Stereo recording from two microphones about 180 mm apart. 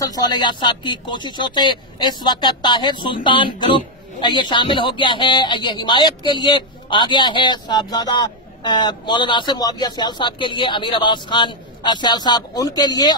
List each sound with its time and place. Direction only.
0.0 s speech: 20° left (ahead or behind)